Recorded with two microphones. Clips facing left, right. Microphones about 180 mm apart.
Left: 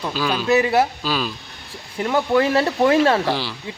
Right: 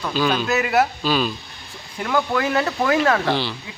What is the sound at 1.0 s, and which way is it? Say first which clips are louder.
Speech: right 3 dB; centre (ahead or behind).